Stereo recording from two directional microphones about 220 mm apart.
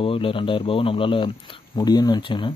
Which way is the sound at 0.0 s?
25° left (ahead or behind).